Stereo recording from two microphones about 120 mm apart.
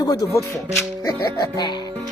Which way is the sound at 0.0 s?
30° left (ahead or behind).